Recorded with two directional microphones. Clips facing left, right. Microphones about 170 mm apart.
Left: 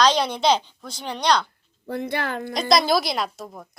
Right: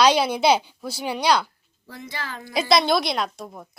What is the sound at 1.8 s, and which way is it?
Speech, 60° left (ahead or behind).